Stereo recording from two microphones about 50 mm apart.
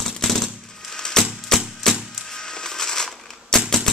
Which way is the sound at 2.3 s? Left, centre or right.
Centre.